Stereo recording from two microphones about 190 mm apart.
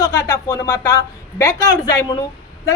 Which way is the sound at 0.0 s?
15° left (ahead or behind).